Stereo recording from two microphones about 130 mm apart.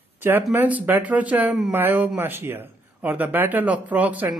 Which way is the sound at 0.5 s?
15° right (ahead or behind).